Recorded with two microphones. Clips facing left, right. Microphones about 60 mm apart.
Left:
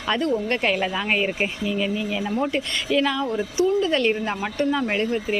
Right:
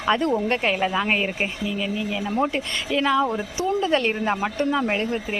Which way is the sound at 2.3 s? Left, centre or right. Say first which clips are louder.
Right 2 dB; centre.